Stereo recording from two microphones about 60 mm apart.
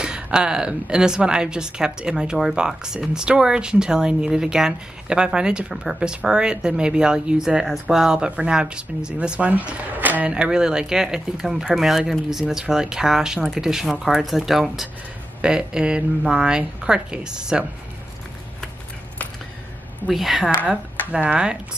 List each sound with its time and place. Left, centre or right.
0.0 s speech: centre
9.5 s speech: right
10.3 s speech: centre
20.1 s a woman's voice: centre
20.5 s speech: right